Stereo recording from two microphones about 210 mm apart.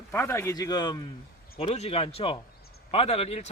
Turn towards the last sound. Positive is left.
turn(degrees=30)  # may be behind; listen again after turning